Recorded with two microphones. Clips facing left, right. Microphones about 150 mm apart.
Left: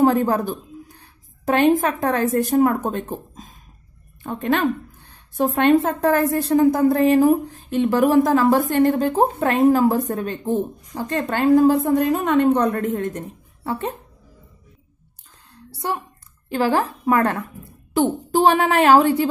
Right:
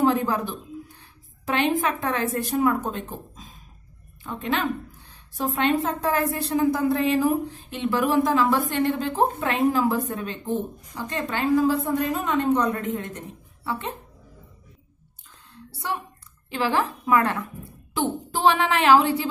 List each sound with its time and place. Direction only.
0.0 s a woman's voice: 45° left (ahead or behind)
16.4 s a woman's voice: 45° left (ahead or behind)